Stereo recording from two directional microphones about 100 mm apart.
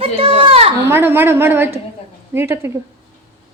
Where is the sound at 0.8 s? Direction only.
20° right (ahead or behind).